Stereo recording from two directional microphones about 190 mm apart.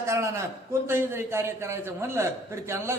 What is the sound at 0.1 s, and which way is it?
A man's voice, 15° right (ahead or behind).